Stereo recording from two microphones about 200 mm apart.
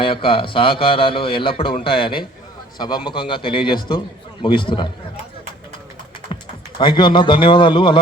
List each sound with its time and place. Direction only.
0.0 s speech: 25° left (ahead or behind)
6.7 s speech: 25° left (ahead or behind)